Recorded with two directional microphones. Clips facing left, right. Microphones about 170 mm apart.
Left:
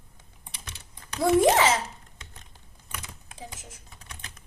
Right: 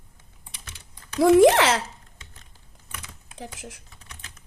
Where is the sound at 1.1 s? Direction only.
90° right.